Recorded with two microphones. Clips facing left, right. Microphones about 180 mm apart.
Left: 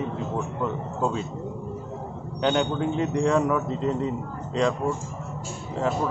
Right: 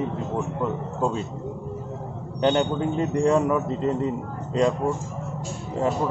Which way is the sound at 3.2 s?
5° right (ahead or behind).